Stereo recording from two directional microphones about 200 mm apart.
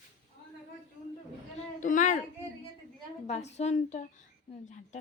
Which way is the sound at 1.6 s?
40° left (ahead or behind).